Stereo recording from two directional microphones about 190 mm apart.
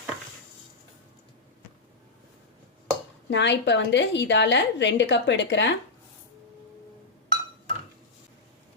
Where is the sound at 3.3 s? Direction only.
65° left (ahead or behind).